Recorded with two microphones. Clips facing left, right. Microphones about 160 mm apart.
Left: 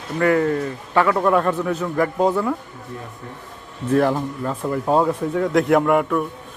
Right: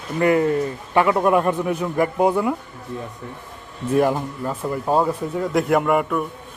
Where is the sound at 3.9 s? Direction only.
10° right (ahead or behind).